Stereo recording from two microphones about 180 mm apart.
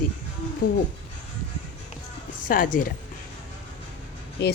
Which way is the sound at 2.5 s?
50° left (ahead or behind).